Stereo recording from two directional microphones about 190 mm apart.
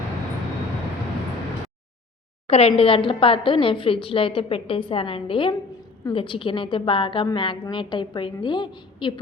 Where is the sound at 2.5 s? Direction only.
30° left (ahead or behind).